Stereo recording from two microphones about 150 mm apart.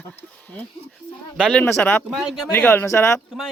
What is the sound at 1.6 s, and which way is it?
Speech, 15° left (ahead or behind).